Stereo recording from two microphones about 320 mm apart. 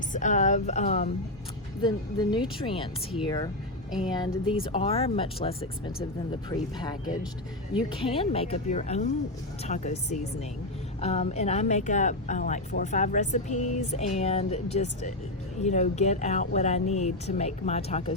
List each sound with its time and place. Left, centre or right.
0.1 s speech: left
4.6 s speech: centre